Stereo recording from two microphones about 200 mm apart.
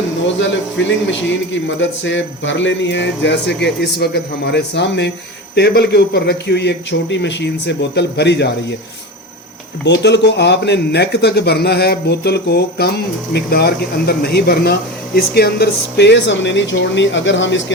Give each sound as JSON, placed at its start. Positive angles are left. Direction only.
{"t": 0.3, "sound": "speech", "side_deg": 65}
{"t": 9.8, "sound": "speech", "side_deg": 60}